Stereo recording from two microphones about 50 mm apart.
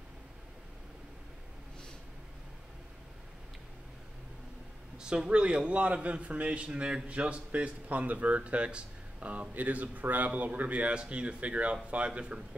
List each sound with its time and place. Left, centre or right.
4.9 s a man's voice: centre